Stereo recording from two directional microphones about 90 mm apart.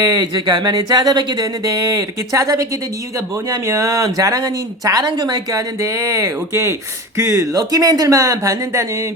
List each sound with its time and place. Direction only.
0.0 s speech: 45° right (ahead or behind)
3.7 s speech: 35° right (ahead or behind)